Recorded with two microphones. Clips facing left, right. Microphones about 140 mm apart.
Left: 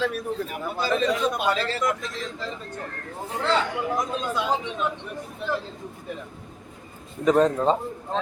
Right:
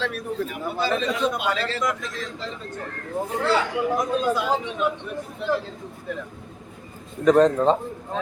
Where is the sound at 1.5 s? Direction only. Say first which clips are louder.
Even; 35° left (ahead or behind).